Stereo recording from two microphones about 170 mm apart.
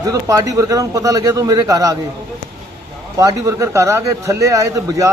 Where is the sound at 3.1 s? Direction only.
20° right (ahead or behind).